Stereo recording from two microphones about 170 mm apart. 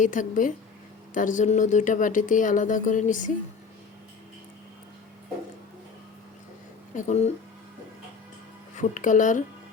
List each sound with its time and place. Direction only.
0.0 s speech: 50° left (ahead or behind)
6.9 s speech: 40° left (ahead or behind)
8.7 s speech: 45° left (ahead or behind)